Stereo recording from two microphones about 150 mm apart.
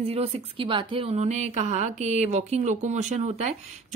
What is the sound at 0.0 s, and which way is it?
Speech, 40° right (ahead or behind).